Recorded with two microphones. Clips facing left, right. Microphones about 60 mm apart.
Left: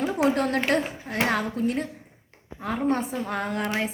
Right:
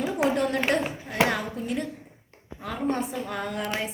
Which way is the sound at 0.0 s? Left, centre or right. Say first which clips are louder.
Left 1 dB; left.